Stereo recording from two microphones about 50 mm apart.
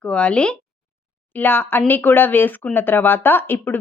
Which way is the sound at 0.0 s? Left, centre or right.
Left.